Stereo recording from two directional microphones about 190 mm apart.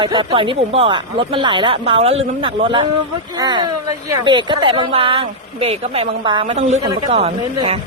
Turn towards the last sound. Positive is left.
turn(degrees=-30)  # may be behind; listen again after turning